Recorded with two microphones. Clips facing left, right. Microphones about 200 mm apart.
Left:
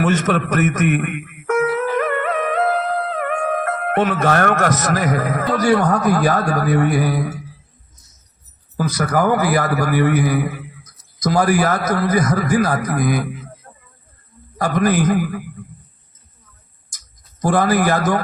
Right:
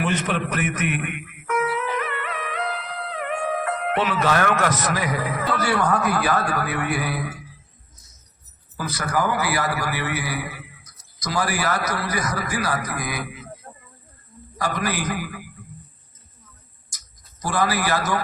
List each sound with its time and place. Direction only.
0.0 s music: 45° left (ahead or behind)
5.5 s a man's voice: 40° left (ahead or behind)
9.1 s a man's voice: 50° left (ahead or behind)
14.6 s a man's voice: 50° left (ahead or behind)
17.4 s a man's voice: 50° left (ahead or behind)